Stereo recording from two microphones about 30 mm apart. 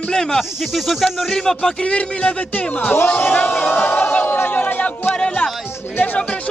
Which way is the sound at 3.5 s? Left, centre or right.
Left.